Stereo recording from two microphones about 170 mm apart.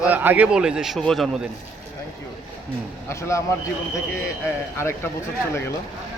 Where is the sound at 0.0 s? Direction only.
10° right (ahead or behind).